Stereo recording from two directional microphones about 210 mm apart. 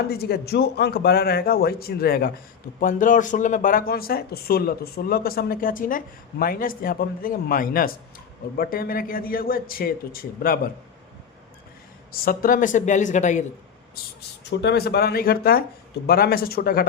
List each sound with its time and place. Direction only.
0.1 s speech: 50° left (ahead or behind)
12.1 s a woman's voice: 45° left (ahead or behind)
14.2 s speech: 50° left (ahead or behind)